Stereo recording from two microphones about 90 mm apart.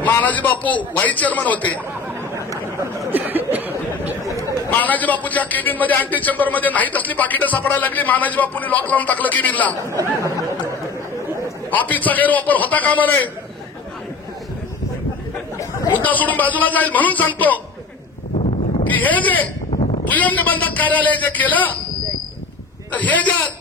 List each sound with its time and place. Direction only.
0.2 s a man's voice: 20° left (ahead or behind)
2.3 s chatter: 35° right (ahead or behind)
3.1 s a sound: 20° right (ahead or behind)
4.6 s a man's voice: 20° left (ahead or behind)
9.8 s speech: 40° right (ahead or behind)
11.7 s a man's voice: 20° left (ahead or behind)
16.0 s a man's voice: 20° left (ahead or behind)
18.9 s a man's voice: 20° left (ahead or behind)
22.8 s a man's voice: 15° left (ahead or behind)